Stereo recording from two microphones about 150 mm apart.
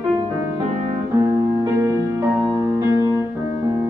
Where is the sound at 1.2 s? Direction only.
20° right (ahead or behind).